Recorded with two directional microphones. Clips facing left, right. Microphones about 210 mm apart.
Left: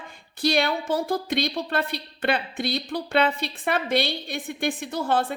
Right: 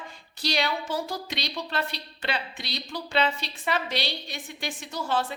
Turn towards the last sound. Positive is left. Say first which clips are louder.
# left 4 dB
turn(degrees=55)  # may be behind; listen again after turning